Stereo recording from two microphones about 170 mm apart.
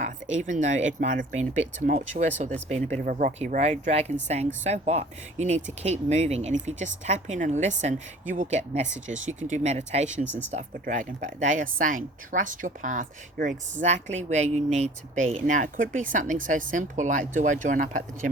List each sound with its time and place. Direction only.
0.0 s speech: 50° right (ahead or behind)
2.1 s speech: 40° right (ahead or behind)
3.6 s speech: 40° right (ahead or behind)